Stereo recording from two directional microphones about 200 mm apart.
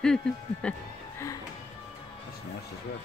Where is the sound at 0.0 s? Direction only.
5° left (ahead or behind).